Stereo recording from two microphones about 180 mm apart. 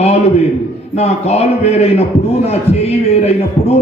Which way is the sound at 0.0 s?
35° left (ahead or behind).